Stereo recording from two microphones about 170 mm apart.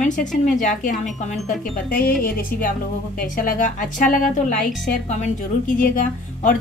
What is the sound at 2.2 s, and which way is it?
A woman's voice, 55° left (ahead or behind).